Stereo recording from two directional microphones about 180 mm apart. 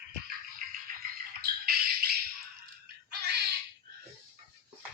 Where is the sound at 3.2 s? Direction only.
65° right (ahead or behind).